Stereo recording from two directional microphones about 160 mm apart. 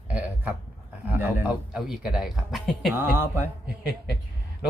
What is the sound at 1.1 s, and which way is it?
Speech, 10° right (ahead or behind).